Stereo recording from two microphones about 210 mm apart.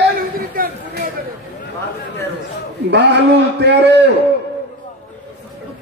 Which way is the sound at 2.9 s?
55° right (ahead or behind).